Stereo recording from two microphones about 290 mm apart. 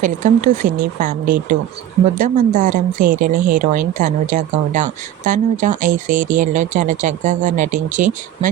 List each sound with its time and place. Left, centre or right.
0.0 s speech: right